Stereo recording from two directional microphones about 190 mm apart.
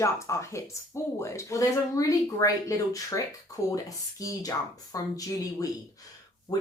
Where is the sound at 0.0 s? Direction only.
15° left (ahead or behind).